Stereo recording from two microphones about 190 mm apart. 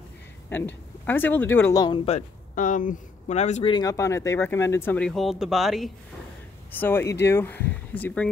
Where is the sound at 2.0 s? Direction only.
40° left (ahead or behind).